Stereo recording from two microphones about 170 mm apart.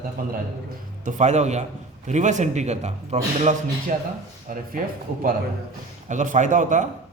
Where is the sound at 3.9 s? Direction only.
55° right (ahead or behind).